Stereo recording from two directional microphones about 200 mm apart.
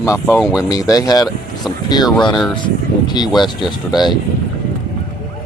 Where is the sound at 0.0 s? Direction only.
15° left (ahead or behind).